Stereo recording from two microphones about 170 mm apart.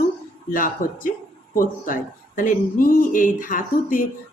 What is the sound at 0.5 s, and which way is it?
Speech, 55° left (ahead or behind).